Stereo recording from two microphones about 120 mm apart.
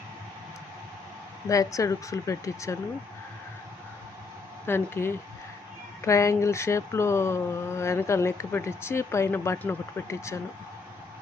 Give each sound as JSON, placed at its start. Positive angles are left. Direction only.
{"t": 1.5, "sound": "speech", "side_deg": 25}
{"t": 4.6, "sound": "speech", "side_deg": 20}